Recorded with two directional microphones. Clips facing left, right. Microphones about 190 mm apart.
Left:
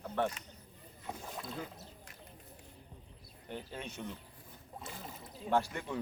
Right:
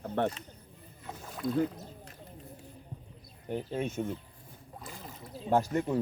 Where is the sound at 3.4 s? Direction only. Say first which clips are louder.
Right 10 dB; 45° right (ahead or behind).